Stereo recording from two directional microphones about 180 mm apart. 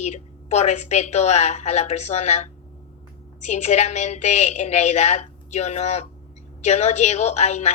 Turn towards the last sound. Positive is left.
turn(degrees=40)  # may be behind; listen again after turning